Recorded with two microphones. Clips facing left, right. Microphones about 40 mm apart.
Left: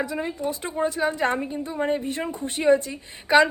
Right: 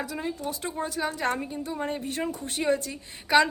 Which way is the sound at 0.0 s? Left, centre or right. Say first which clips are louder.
Left 5 dB; left.